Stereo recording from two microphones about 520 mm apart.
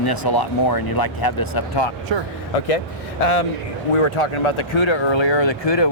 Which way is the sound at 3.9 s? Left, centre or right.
Left.